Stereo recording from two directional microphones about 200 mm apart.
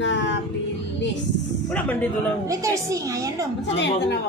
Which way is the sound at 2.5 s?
15° right (ahead or behind).